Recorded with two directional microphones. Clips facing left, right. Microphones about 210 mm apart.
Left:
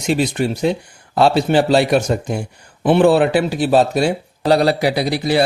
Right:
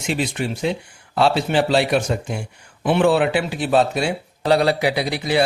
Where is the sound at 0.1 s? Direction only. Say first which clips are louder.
Left 6 dB; 40° left (ahead or behind).